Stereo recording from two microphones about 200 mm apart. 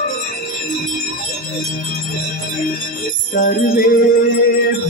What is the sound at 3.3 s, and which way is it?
Music, 40° left (ahead or behind).